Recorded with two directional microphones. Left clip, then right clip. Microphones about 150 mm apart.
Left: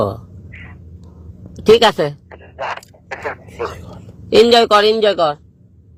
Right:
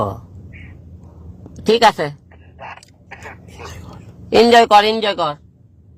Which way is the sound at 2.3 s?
45° left (ahead or behind).